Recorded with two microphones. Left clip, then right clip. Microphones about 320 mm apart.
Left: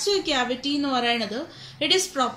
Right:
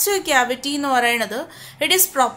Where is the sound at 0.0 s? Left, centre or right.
Right.